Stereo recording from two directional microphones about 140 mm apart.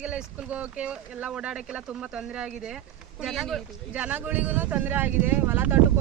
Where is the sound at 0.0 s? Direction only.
10° right (ahead or behind).